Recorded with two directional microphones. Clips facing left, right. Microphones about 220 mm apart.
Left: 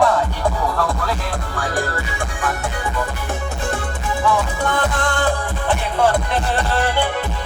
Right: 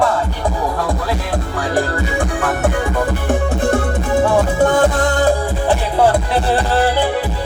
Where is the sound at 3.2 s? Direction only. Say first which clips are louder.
Right 8 dB; 55° right (ahead or behind); by 7.1 s 35° right (ahead or behind).